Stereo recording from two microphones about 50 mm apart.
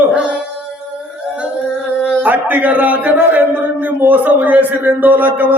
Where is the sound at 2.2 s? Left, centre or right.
Right.